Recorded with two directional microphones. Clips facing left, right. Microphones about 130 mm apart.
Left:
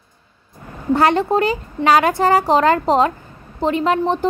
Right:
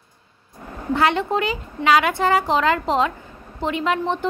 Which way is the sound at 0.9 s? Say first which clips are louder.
Left 4 dB; 40° left (ahead or behind).